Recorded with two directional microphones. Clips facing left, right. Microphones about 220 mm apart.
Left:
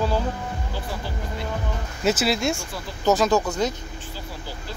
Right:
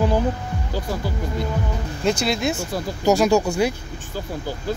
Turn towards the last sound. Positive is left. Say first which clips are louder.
# right 3 dB
turn(degrees=-10)  # may be behind; listen again after turning